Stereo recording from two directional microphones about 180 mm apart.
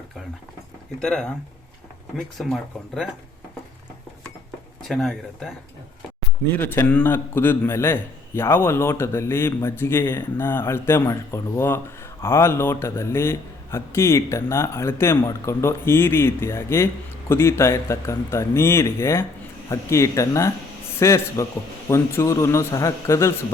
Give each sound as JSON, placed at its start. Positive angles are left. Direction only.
{"t": 0.9, "sound": "speech", "side_deg": 5}
{"t": 4.9, "sound": "speech", "side_deg": 0}
{"t": 6.6, "sound": "a man's voice", "side_deg": 10}